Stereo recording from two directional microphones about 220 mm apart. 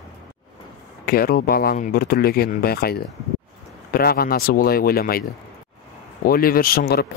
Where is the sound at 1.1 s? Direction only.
45° left (ahead or behind).